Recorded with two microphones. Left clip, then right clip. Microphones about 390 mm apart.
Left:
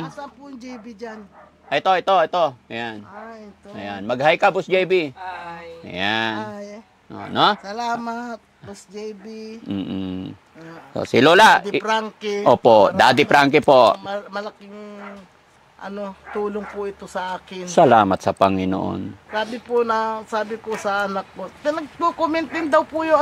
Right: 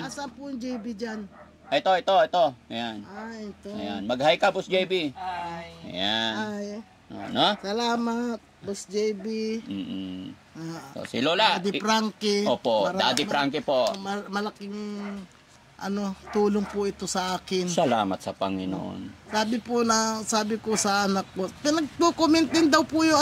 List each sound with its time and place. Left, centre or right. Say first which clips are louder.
0.0 s speech: left 2 dB; centre
1.7 s speech: left 5 dB; left
6.4 s speech: left 1 dB; centre
7.3 s speech: left 6 dB; left
7.6 s speech: left 2 dB; centre
9.7 s speech: left 7 dB; left
11.8 s speech: left 3 dB; right
12.4 s speech: left 15 dB; left
13.9 s speech: left 3 dB; right
17.7 s speech: left 12 dB; left
19.3 s speech: left 5 dB; right